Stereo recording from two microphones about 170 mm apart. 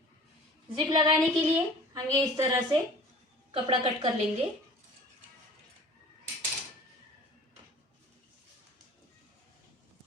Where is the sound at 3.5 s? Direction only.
30° right (ahead or behind).